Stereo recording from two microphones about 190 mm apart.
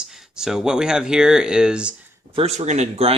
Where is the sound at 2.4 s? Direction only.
35° right (ahead or behind).